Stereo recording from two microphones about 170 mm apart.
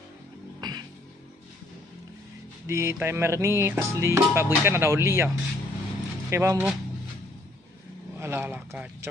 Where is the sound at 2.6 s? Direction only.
15° right (ahead or behind).